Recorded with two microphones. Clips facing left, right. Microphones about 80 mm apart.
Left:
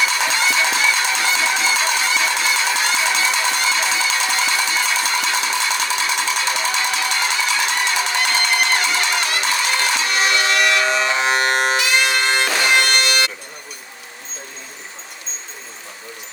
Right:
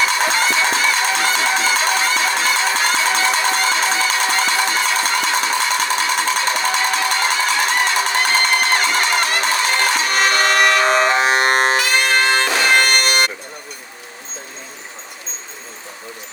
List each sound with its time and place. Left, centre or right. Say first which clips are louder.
0.0 s music: right 2 dB; right